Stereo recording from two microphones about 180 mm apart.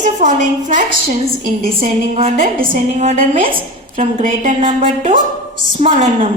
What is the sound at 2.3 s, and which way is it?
A woman's voice, 50° right (ahead or behind).